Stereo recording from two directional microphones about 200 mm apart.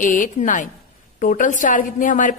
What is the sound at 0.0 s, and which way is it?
A woman's voice, 40° left (ahead or behind).